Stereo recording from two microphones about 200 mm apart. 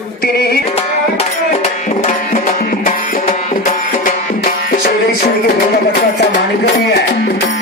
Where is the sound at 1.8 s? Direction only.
40° left (ahead or behind).